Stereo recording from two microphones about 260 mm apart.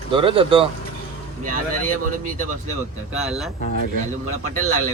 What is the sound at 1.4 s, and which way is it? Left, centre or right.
Speech, right.